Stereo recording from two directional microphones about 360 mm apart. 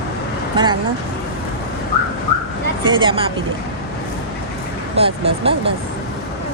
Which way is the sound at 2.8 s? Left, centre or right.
Centre.